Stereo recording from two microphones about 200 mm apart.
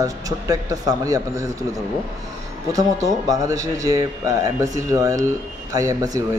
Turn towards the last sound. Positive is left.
turn(degrees=-15)  # may be behind; listen again after turning